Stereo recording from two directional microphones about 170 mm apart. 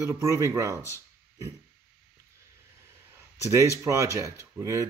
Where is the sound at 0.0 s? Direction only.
15° right (ahead or behind).